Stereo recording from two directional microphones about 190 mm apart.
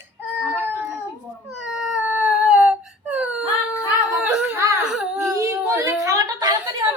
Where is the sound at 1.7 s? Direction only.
5° right (ahead or behind).